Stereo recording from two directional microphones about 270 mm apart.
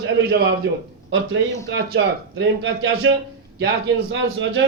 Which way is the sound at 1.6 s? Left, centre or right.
Right.